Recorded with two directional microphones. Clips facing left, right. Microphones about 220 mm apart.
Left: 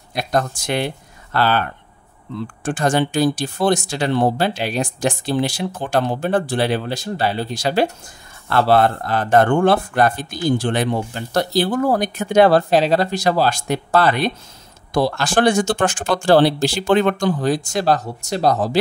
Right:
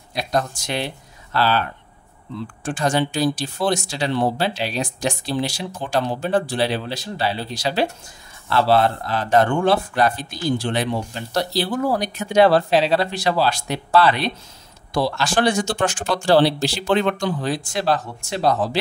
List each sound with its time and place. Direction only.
0.1 s speech: 50° left (ahead or behind)